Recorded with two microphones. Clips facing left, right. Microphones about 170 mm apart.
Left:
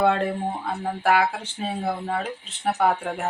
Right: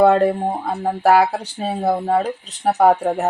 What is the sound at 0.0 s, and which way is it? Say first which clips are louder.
Speech: right 8 dB; 40° right (ahead or behind).